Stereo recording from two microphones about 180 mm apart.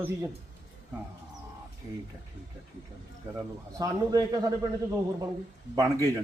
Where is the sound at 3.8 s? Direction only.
20° right (ahead or behind).